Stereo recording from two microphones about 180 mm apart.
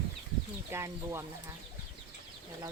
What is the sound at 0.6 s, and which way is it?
Speech, 15° right (ahead or behind).